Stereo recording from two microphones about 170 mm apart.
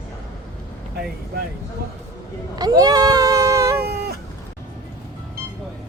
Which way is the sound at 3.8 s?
70° right (ahead or behind).